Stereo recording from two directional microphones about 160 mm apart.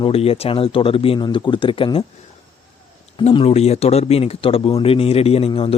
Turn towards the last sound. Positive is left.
turn(degrees=35)  # may be behind; listen again after turning